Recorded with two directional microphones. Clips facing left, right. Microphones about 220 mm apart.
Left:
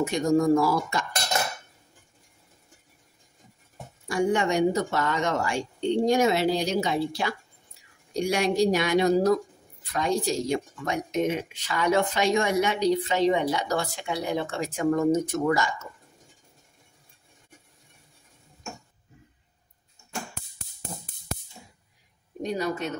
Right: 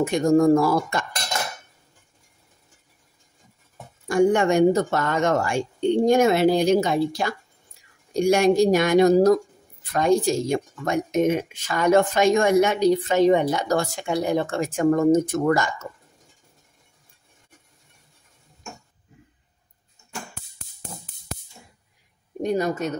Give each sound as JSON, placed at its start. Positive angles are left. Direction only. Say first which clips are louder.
{"t": 0.0, "sound": "speech", "louder": "right 5 dB", "side_deg": -50}
{"t": 4.1, "sound": "speech", "louder": "right 6 dB", "side_deg": -50}
{"t": 22.4, "sound": "speech", "louder": "right 5 dB", "side_deg": -50}